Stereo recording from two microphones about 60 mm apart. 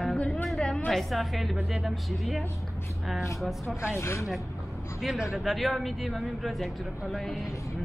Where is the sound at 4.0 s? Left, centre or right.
Left.